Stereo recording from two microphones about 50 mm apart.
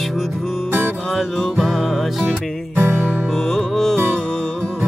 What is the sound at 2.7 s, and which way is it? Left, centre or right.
Music, right.